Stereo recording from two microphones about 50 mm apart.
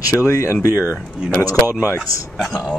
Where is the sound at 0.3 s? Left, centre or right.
Left.